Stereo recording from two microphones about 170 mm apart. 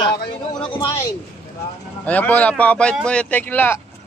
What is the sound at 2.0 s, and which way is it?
Speech, 10° left (ahead or behind).